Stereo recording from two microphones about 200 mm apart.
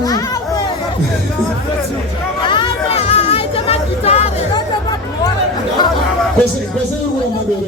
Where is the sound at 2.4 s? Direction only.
25° left (ahead or behind).